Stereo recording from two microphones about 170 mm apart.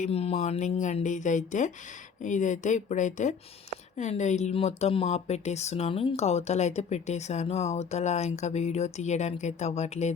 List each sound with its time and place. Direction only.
0.0 s speech: 35° left (ahead or behind)